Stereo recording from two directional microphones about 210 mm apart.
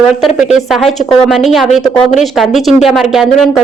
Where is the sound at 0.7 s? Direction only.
Centre (ahead or behind).